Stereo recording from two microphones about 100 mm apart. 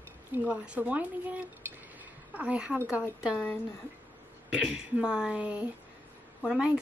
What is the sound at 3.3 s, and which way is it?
Speech, 25° left (ahead or behind).